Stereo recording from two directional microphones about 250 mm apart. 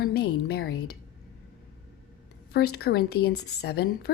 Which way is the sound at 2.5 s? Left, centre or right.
Left.